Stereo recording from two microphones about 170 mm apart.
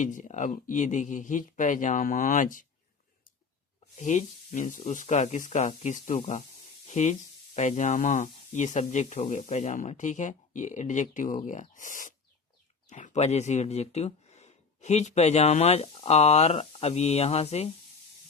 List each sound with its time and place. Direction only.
0.0 s speech: 45° left (ahead or behind)
3.9 s speech: 45° left (ahead or behind)